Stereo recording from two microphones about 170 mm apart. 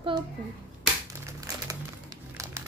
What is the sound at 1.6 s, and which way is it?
Music, 20° right (ahead or behind).